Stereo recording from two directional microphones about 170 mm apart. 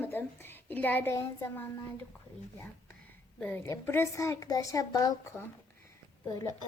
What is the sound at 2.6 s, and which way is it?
A woman's voice, 10° left (ahead or behind).